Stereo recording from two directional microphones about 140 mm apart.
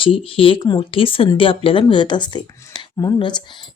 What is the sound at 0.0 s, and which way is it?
Speech, 40° left (ahead or behind).